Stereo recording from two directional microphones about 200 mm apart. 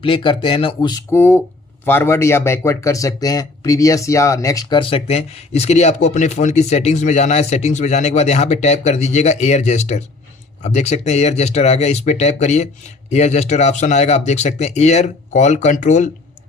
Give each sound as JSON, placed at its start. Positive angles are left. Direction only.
{"t": 0.0, "sound": "a man's voice", "side_deg": 25}